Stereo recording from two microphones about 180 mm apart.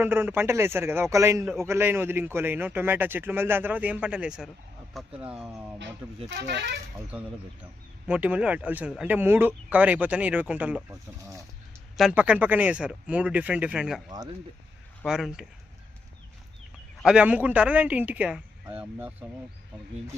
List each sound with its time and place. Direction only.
0.0 s a man's voice: 10° right (ahead or behind)
6.3 s speech: 70° right (ahead or behind)
7.1 s a man's voice: 5° right (ahead or behind)
11.9 s a man's voice: 5° right (ahead or behind)
15.0 s speech: 5° right (ahead or behind)
17.0 s a man's voice: 5° right (ahead or behind)